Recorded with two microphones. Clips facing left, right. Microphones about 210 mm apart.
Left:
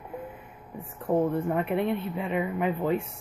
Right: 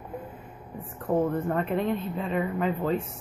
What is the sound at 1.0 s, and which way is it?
Speech, 15° left (ahead or behind).